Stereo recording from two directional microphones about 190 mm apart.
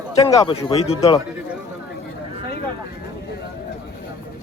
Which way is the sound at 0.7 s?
30° left (ahead or behind).